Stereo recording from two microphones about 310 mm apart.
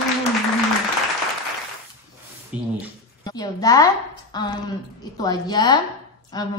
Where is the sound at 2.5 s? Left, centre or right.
Centre.